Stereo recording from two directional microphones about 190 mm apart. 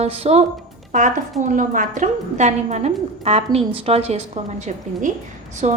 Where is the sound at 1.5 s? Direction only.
45° right (ahead or behind).